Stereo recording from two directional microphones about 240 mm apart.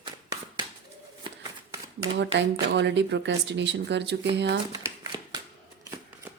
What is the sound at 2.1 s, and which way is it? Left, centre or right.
A woman's voice, right.